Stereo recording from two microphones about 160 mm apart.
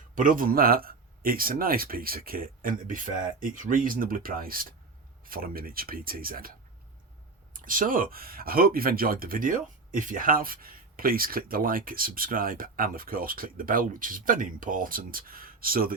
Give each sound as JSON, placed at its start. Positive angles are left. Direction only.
{"t": 0.2, "sound": "speech", "side_deg": -60}
{"t": 7.5, "sound": "speech", "side_deg": -60}